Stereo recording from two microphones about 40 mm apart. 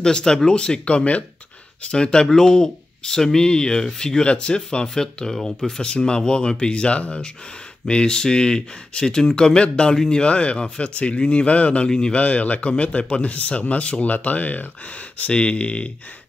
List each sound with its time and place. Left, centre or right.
0.0 s speech: centre; by 1.2 s left
1.8 s speech: left
11.9 s speech: left
12.2 s speech: left
14.1 s speech: left
15.3 s speech: left